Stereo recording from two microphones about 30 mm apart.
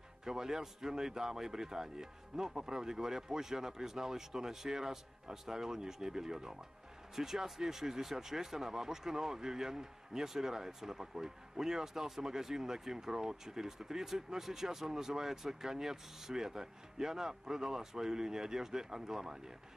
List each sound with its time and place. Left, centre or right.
0.2 s speech: centre